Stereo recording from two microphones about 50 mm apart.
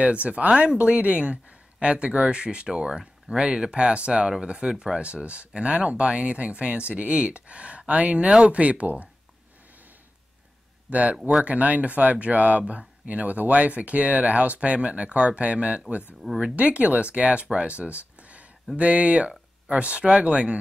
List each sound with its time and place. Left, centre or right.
0.0 s speech: right
10.9 s speech: right
16.2 s speech: centre
16.5 s speech: right